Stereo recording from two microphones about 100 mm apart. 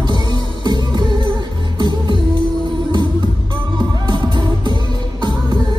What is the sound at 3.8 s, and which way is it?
Music, 45° right (ahead or behind).